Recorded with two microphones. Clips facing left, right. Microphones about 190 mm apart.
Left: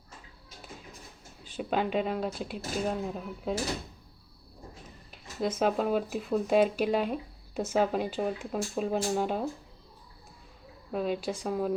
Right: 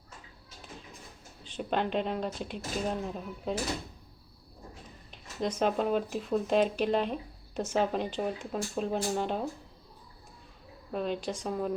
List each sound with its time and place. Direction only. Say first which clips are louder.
1.5 s speech: left 1 dB; 5° left (ahead or behind)
5.1 s speech: left 1 dB; 5° left (ahead or behind)
10.9 s speech: left 2 dB; 5° left (ahead or behind)